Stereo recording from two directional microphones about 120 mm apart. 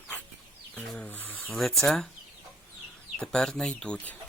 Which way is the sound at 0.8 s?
15° left (ahead or behind).